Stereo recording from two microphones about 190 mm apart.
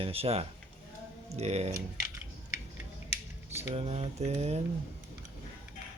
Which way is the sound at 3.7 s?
30° right (ahead or behind).